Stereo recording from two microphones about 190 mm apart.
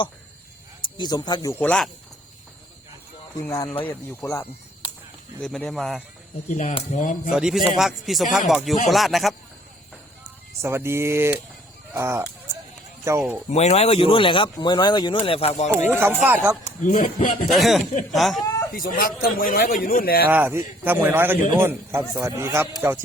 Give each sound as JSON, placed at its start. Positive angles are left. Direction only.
{"t": 0.9, "sound": "speech", "side_deg": 20}
{"t": 3.4, "sound": "speech", "side_deg": 15}
{"t": 5.4, "sound": "speech", "side_deg": 5}
{"t": 6.7, "sound": "speech", "side_deg": 40}
{"t": 7.3, "sound": "speech", "side_deg": 0}
{"t": 10.6, "sound": "a man's voice", "side_deg": -15}
{"t": 13.5, "sound": "speech", "side_deg": 35}
{"t": 15.9, "sound": "a man's voice", "side_deg": -10}
{"t": 16.8, "sound": "a man's voice", "side_deg": 40}
{"t": 17.5, "sound": "speech", "side_deg": 0}
{"t": 18.7, "sound": "a man's voice", "side_deg": 50}
{"t": 20.2, "sound": "a man's voice", "side_deg": -10}